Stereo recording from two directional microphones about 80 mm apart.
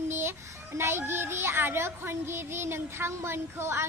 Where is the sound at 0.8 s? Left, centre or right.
Right.